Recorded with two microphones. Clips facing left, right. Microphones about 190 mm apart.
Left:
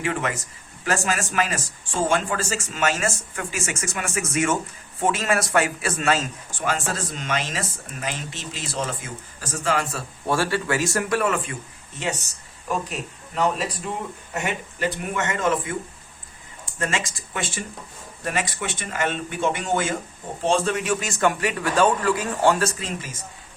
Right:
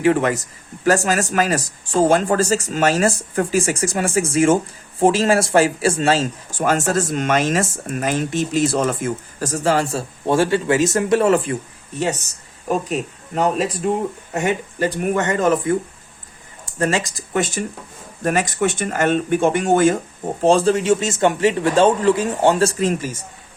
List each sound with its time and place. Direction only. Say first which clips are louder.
0.0 s speech: right 10 dB; 35° right (ahead or behind)
6.6 s speech: right 8 dB; 45° right (ahead or behind)
12.6 s speech: right 7 dB; 45° right (ahead or behind)
16.7 s speech: right 7 dB; 35° right (ahead or behind)
20.4 s speech: right 7 dB; 35° right (ahead or behind)